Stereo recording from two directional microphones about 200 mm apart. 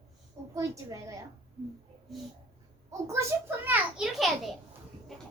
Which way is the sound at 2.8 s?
15° right (ahead or behind).